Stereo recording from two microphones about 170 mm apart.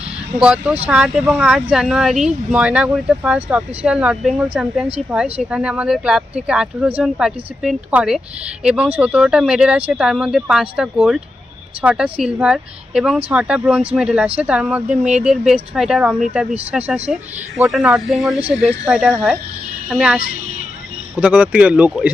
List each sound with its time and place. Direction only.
0.3 s speech: 5° right (ahead or behind)
19.1 s speech: 15° right (ahead or behind)